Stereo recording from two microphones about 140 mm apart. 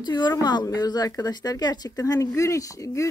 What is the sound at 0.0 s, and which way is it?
A woman's voice, 30° left (ahead or behind).